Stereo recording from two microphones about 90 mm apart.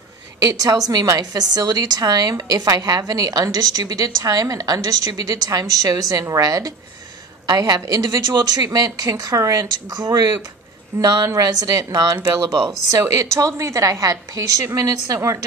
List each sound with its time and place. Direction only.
0.4 s a woman's voice: 40° right (ahead or behind)
10.9 s a woman's voice: 30° right (ahead or behind)
11.2 s speech: 40° right (ahead or behind)
12.9 s a woman's voice: 35° right (ahead or behind)